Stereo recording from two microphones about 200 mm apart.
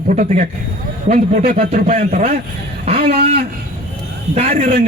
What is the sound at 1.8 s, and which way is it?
Speech, 40° right (ahead or behind).